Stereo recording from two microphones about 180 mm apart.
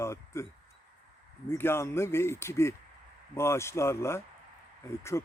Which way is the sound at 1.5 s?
15° left (ahead or behind).